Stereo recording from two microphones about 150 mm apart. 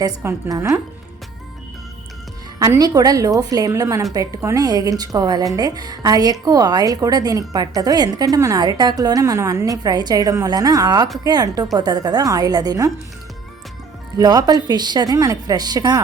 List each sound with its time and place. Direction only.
0.0 s a woman's voice: 20° right (ahead or behind)
2.6 s a woman's voice: 25° right (ahead or behind)
14.2 s a woman's voice: 25° right (ahead or behind)